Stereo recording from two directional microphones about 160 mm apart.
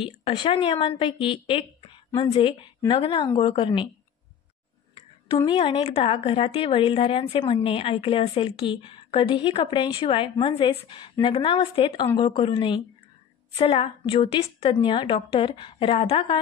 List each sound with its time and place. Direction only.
0.0 s a woman's voice: 35° left (ahead or behind)
5.4 s a woman's voice: 30° left (ahead or behind)